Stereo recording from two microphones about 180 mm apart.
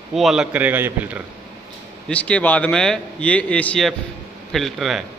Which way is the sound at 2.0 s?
5° left (ahead or behind).